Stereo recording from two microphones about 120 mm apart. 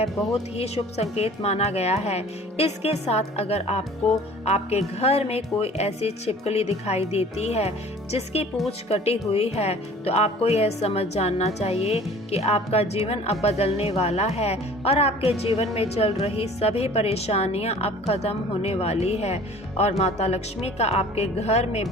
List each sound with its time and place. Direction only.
0.5 s speech: 60° left (ahead or behind)